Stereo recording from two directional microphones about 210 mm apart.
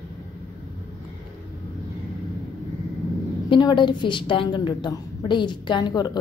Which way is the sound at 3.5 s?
20° left (ahead or behind).